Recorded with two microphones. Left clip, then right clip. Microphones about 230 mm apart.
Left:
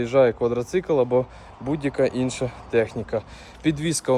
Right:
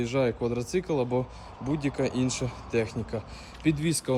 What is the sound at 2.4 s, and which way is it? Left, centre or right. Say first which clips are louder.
Speech: left 7 dB; left.